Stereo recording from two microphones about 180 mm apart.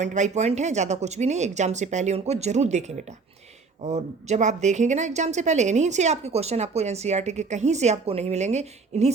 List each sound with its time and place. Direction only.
0.0 s a woman's voice: 40° right (ahead or behind)